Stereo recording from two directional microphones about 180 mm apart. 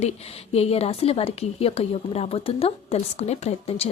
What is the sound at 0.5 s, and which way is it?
A woman's voice, 35° left (ahead or behind).